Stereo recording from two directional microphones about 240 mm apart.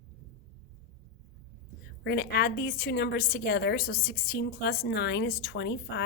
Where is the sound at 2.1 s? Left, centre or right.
Left.